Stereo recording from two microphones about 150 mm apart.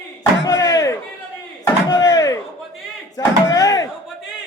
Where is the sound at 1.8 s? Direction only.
25° left (ahead or behind).